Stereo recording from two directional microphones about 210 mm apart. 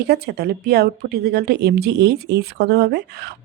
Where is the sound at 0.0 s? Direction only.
50° right (ahead or behind).